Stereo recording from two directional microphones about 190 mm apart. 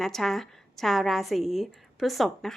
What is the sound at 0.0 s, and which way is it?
A woman's voice, centre (ahead or behind).